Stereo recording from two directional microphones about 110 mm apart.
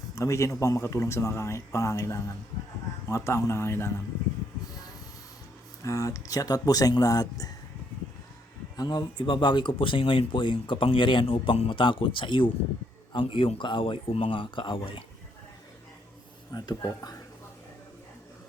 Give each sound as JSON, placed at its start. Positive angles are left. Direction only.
{"t": 0.2, "sound": "speech", "side_deg": 25}
{"t": 5.8, "sound": "speech", "side_deg": 30}
{"t": 8.7, "sound": "speech", "side_deg": 40}
{"t": 16.5, "sound": "speech", "side_deg": 35}